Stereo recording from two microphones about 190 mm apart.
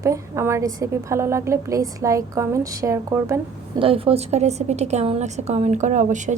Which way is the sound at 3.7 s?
30° right (ahead or behind).